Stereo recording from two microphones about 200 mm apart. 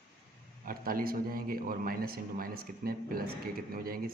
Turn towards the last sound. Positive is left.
turn(degrees=-45)  # may be behind; listen again after turning